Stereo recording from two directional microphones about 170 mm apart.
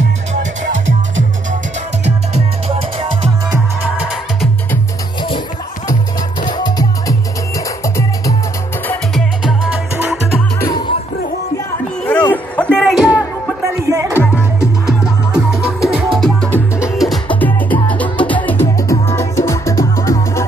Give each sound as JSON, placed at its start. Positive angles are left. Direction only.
{"t": 6.4, "sound": "music", "side_deg": 25}
{"t": 12.1, "sound": "a sound", "side_deg": 10}
{"t": 13.8, "sound": "music", "side_deg": -20}
{"t": 14.1, "sound": "music", "side_deg": 15}
{"t": 15.3, "sound": "music", "side_deg": -5}